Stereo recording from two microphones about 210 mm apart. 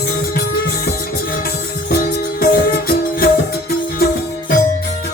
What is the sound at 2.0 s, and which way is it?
Music, 45° left (ahead or behind).